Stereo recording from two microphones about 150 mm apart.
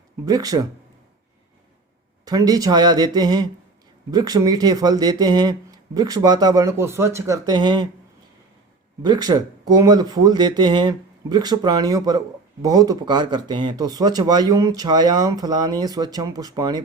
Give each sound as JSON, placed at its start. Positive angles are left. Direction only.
{"t": 0.3, "sound": "speech", "side_deg": -25}
{"t": 2.2, "sound": "speech", "side_deg": -25}
{"t": 9.0, "sound": "speech", "side_deg": -30}